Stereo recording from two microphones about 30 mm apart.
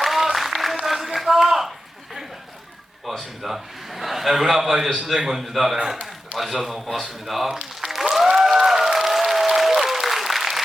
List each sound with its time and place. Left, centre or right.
0.0 s a sound: centre
3.4 s a man's voice: centre
5.8 s a man's voice: right
6.3 s a man's voice: centre
7.8 s applause: centre